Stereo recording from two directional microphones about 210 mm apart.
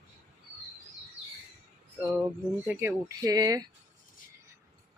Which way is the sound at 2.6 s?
10° right (ahead or behind).